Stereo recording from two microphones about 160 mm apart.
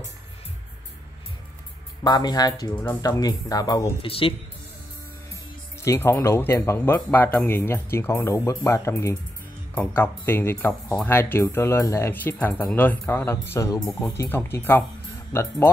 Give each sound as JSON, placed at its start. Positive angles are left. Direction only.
{"t": 2.0, "sound": "speech", "side_deg": 25}
{"t": 2.7, "sound": "speech", "side_deg": 10}
{"t": 3.0, "sound": "speech", "side_deg": 25}
{"t": 4.0, "sound": "speech", "side_deg": 35}
{"t": 5.8, "sound": "speech", "side_deg": 15}